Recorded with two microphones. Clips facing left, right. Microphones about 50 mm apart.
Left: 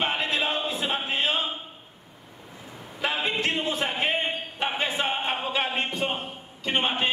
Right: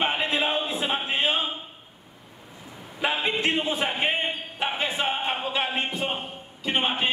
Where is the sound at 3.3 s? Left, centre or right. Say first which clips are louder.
Right 2 dB; centre.